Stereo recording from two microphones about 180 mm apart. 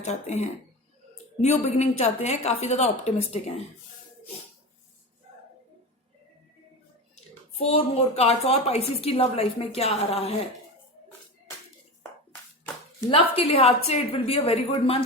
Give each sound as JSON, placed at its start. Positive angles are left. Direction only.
{"t": 0.0, "sound": "a woman's voice", "side_deg": 40}
{"t": 7.6, "sound": "a woman's voice", "side_deg": 35}
{"t": 12.3, "sound": "a sound", "side_deg": 10}
{"t": 13.1, "sound": "a woman's voice", "side_deg": 30}